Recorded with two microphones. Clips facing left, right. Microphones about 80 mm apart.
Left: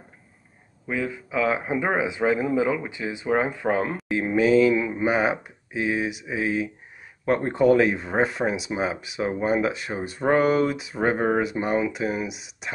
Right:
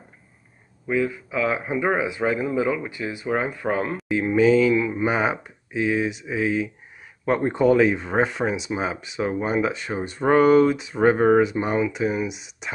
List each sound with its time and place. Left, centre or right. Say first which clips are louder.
0.8 s speech: right 5 dB; left
3.9 s speech: right 2 dB; centre